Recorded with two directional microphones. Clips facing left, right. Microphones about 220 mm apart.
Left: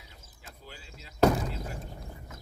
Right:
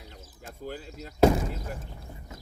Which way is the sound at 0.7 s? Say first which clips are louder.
Right 13 dB; 50° right (ahead or behind).